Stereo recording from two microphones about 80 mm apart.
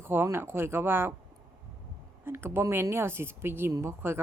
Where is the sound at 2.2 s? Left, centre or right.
Right.